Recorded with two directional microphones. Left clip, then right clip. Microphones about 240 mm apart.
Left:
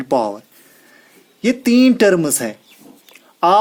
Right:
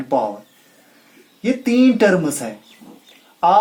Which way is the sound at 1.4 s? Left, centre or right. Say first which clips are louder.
Left 2 dB; left.